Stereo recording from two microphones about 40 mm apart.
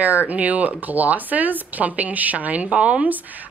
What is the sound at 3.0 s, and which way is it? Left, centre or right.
Speech, right.